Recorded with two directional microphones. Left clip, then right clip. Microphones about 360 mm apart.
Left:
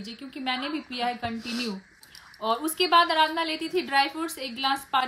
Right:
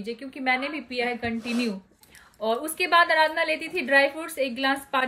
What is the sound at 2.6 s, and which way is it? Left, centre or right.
A woman's voice, centre.